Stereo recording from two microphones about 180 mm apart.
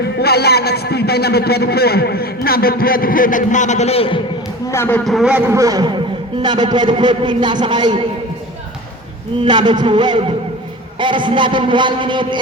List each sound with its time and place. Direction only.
0.2 s a man's voice: 60° left (ahead or behind); by 4.2 s 35° left (ahead or behind)
4.7 s a man's voice: 10° left (ahead or behind)
5.0 s a man's voice: centre (ahead or behind)
5.5 s a man's voice: 20° right (ahead or behind)
9.4 s a man's voice: 25° right (ahead or behind)